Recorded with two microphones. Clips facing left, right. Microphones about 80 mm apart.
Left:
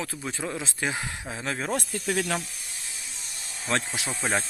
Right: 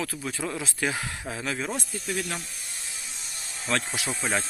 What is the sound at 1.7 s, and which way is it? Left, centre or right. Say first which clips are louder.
Speech: left 4 dB; left.